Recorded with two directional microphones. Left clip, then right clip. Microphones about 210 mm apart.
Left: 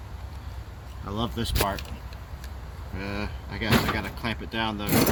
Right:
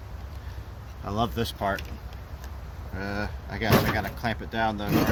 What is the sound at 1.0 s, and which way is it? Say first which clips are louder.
Speech: right 3 dB; 35° right (ahead or behind).